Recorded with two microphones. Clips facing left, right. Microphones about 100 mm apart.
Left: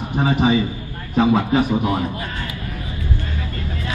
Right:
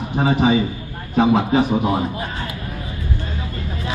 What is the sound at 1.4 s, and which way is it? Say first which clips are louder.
Speech: right 1 dB; 20° right (ahead or behind).